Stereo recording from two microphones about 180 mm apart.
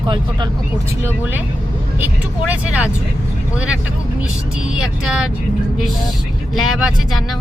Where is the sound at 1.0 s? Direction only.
10° right (ahead or behind).